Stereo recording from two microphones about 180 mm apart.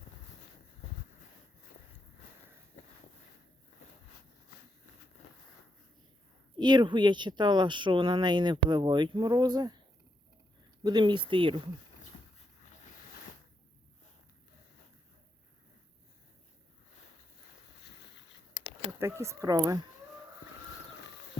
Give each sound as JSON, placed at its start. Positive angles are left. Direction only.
{"t": 2.8, "sound": "a sound", "side_deg": 40}
{"t": 6.6, "sound": "speech", "side_deg": -25}
{"t": 10.8, "sound": "speech", "side_deg": -25}
{"t": 18.9, "sound": "speech", "side_deg": -15}